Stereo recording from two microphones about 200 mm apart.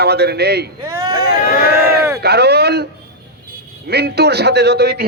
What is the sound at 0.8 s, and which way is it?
Speech, 15° right (ahead or behind).